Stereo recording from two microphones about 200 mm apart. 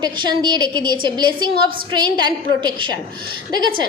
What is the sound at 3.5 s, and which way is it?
Speech, 20° right (ahead or behind).